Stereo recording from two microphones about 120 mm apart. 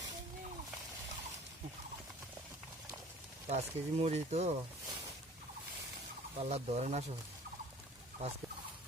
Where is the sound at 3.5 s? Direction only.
65° right (ahead or behind).